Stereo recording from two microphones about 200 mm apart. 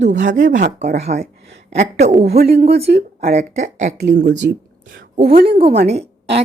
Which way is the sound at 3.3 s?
35° right (ahead or behind).